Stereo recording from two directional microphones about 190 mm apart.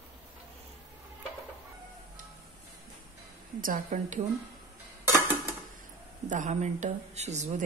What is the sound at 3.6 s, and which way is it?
Speech, 45° right (ahead or behind).